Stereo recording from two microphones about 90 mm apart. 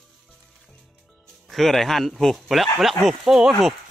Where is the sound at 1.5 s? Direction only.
Centre (ahead or behind).